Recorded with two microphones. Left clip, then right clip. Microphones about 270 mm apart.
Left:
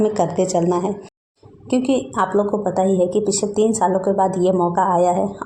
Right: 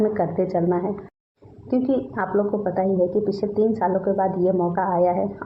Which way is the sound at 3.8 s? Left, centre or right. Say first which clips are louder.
Left 4 dB; centre.